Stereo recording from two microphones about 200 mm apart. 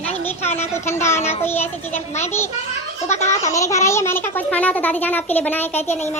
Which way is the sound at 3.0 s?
35° left (ahead or behind).